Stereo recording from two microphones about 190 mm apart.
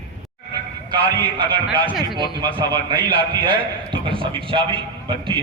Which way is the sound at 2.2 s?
25° right (ahead or behind).